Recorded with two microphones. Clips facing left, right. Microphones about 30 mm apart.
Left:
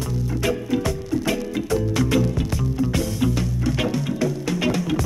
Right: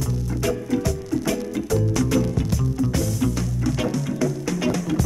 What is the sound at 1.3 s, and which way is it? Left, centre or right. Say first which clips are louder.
Music: left 1 dB; left.